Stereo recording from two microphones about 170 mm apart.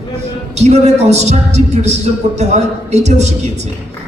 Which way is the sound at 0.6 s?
40° right (ahead or behind).